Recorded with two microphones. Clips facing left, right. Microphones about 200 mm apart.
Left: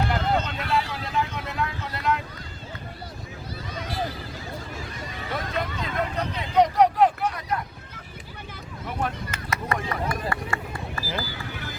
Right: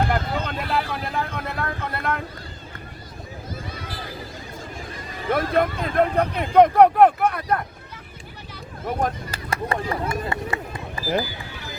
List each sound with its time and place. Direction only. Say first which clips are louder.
0.1 s vehicle: even; 55° right (ahead or behind)
5.3 s speech: right 10 dB; 55° right (ahead or behind)
8.8 s speech: right 5 dB; 45° right (ahead or behind); by 11.4 s 15° right (ahead or behind)